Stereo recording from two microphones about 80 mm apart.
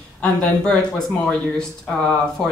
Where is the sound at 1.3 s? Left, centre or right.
Centre.